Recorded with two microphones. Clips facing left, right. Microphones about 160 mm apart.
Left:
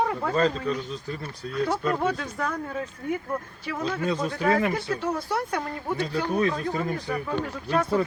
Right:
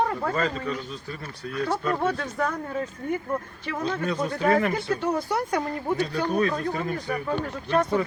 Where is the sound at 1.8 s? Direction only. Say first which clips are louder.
Even; centre (ahead or behind).